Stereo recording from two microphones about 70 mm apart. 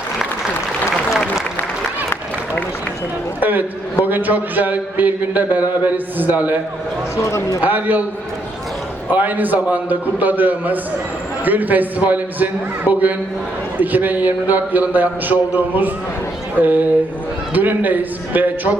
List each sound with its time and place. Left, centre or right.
0.9 s applause: centre
4.0 s speech: right
7.3 s a man's voice: left
7.6 s speech: right
9.1 s speech: right